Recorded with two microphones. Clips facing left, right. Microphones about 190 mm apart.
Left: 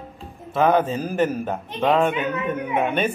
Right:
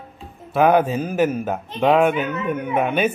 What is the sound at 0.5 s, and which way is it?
A woman's voice, 10° right (ahead or behind).